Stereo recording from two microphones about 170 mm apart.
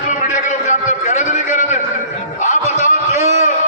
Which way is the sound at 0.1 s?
45° left (ahead or behind).